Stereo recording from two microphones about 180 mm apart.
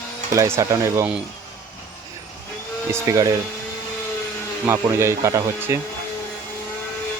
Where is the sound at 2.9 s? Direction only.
15° right (ahead or behind).